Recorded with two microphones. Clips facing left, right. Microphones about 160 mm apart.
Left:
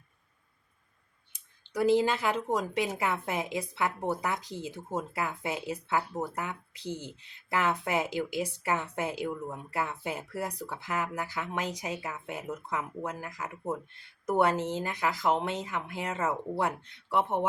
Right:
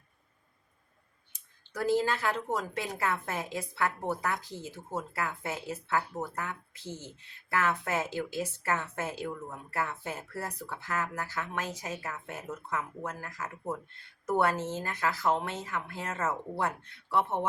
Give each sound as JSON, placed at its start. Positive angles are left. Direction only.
{"t": 1.3, "sound": "speech", "side_deg": 15}